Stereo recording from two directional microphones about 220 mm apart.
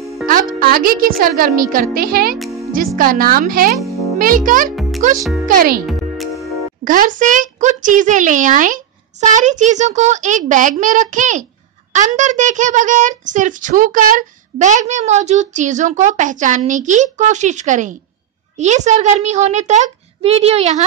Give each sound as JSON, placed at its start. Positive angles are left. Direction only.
{"t": 0.3, "sound": "a child's voice", "side_deg": -35}
{"t": 5.9, "sound": "music", "side_deg": 0}
{"t": 6.8, "sound": "a child's voice", "side_deg": -35}